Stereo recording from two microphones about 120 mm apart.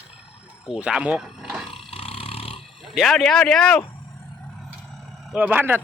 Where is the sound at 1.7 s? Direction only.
50° left (ahead or behind).